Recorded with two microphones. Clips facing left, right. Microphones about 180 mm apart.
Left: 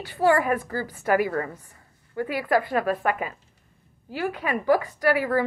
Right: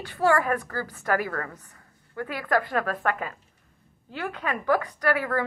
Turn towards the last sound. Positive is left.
turn(degrees=10)  # may be behind; listen again after turning